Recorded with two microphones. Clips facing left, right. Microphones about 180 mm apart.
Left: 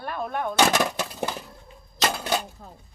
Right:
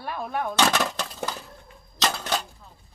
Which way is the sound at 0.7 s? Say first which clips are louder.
Left 2 dB; 15° left (ahead or behind).